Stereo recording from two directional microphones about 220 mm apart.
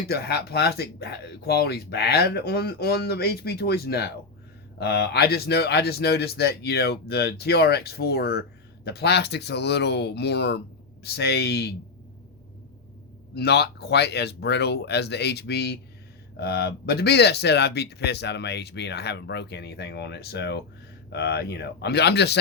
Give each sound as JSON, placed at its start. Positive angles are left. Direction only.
{"t": 0.1, "sound": "speech", "side_deg": 45}
{"t": 13.3, "sound": "speech", "side_deg": 50}